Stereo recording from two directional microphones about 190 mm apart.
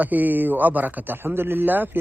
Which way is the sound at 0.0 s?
10° right (ahead or behind).